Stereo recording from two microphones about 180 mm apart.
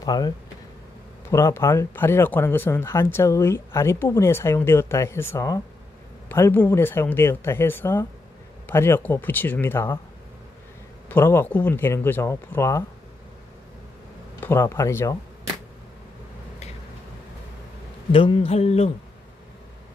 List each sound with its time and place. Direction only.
0.0 s speech: 20° left (ahead or behind)
1.3 s speech: 15° left (ahead or behind)
11.1 s speech: 10° left (ahead or behind)
14.4 s speech: 15° left (ahead or behind)
18.1 s a sound: 30° left (ahead or behind)